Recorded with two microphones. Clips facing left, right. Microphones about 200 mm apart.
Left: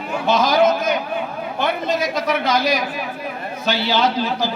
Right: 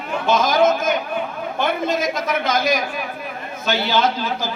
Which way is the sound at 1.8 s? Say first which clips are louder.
Left 1 dB; 50° right (ahead or behind).